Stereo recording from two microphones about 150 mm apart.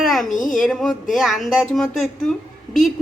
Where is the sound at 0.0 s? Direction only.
Centre (ahead or behind).